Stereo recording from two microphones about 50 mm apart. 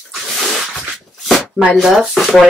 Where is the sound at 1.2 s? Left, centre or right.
Centre.